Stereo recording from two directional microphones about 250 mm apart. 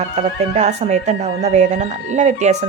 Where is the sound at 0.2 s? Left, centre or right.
Right.